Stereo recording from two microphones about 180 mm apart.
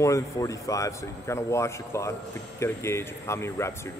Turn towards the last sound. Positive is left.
turn(degrees=15)  # may be behind; listen again after turning